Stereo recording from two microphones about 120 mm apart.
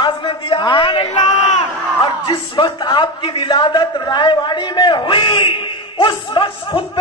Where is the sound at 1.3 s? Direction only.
90° left.